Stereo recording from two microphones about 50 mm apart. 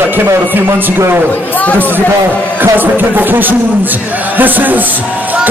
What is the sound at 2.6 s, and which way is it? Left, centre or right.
A man's voice, right.